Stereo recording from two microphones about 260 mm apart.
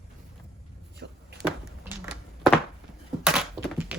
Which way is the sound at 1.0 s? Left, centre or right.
Right.